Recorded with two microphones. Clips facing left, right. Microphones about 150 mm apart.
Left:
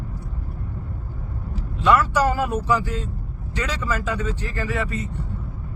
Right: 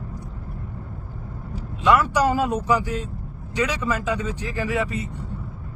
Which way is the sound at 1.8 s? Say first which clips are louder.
Even; 15° right (ahead or behind).